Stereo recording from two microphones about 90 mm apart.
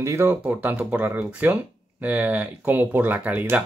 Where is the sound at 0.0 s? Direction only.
30° right (ahead or behind).